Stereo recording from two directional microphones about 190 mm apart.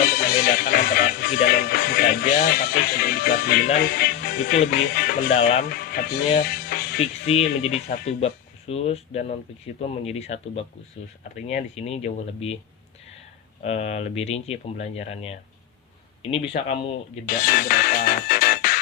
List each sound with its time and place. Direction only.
0.0 s music: 55° left (ahead or behind)
3.9 s speech: 55° left (ahead or behind)
4.7 s music: 55° left (ahead or behind)
5.3 s speech: 35° left (ahead or behind)
5.6 s speech: 55° left (ahead or behind)
6.4 s music: 55° left (ahead or behind)
7.0 s speech: 30° left (ahead or behind)
13.6 s speech: 35° left (ahead or behind)
16.5 s music: 45° left (ahead or behind)
17.2 s music: 55° left (ahead or behind)